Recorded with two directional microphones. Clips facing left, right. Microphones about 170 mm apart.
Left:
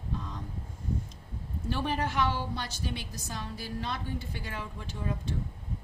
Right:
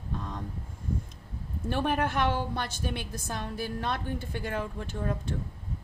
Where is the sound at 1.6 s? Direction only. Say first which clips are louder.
Right 3 dB; 55° right (ahead or behind).